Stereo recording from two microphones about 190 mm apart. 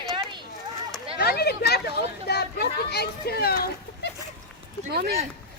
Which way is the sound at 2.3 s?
60° left (ahead or behind).